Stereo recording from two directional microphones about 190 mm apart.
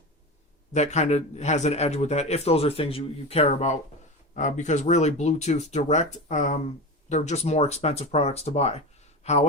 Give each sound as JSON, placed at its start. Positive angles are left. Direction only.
{"t": 0.7, "sound": "a man's voice", "side_deg": 35}